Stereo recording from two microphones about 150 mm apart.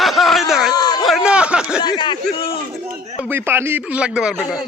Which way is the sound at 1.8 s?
30° left (ahead or behind).